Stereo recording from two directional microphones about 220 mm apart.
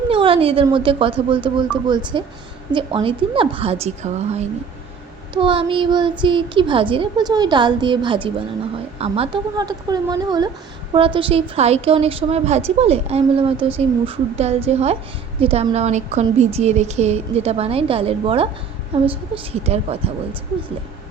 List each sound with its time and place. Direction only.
0.1 s a woman's voice: 25° right (ahead or behind)